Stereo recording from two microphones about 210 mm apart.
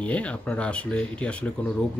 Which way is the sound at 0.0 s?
5° left (ahead or behind).